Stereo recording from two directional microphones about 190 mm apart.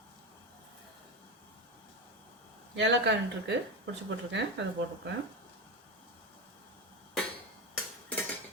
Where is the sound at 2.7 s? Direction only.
70° right (ahead or behind).